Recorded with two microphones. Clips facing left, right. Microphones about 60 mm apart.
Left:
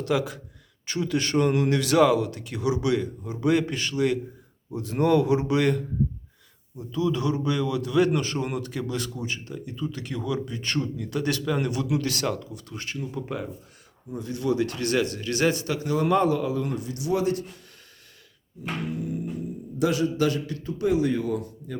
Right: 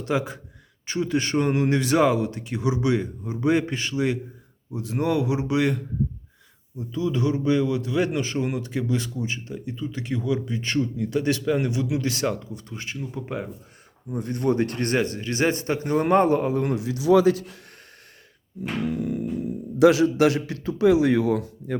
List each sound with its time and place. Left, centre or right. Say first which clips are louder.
0.0 s a man's voice: even; right; by 5.8 s centre
6.7 s speech: even; right
14.2 s a man's voice: right 2 dB; right
17.1 s speech: right 9 dB; right
18.9 s speech: right 4 dB; right